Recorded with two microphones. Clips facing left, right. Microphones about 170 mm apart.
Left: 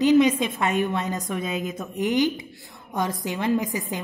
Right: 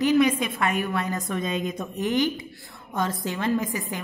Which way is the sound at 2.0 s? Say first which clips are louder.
Left 2 dB; 15° left (ahead or behind).